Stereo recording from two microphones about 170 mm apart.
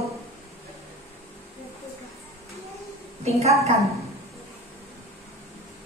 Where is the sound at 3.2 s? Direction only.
40° right (ahead or behind).